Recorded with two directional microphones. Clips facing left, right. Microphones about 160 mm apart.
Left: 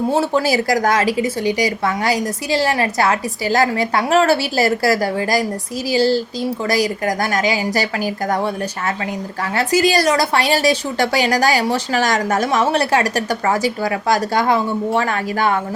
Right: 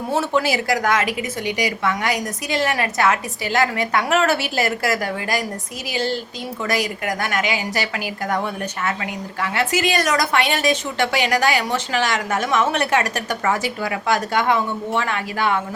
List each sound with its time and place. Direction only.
0.1 s a woman's voice: 30° left (ahead or behind)